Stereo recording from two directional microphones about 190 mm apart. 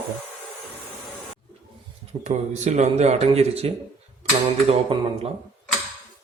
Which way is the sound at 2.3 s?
35° right (ahead or behind).